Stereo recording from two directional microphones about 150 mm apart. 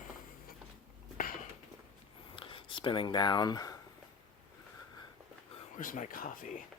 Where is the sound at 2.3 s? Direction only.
35° left (ahead or behind).